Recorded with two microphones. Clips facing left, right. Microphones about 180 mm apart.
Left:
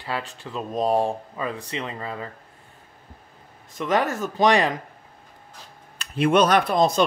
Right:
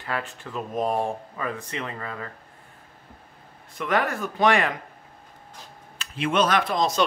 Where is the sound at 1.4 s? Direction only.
20° left (ahead or behind).